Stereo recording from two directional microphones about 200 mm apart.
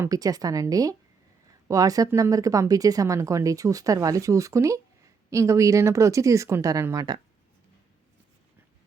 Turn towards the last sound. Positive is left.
turn(degrees=-15)  # may be behind; listen again after turning